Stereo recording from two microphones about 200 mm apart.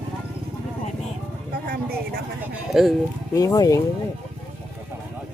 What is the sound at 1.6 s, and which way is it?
Speech, 50° right (ahead or behind).